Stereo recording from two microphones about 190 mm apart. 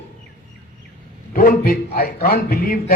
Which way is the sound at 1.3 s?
50° left (ahead or behind).